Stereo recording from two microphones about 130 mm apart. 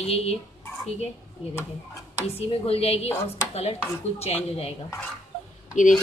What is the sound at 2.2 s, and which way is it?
Speech, 50° left (ahead or behind).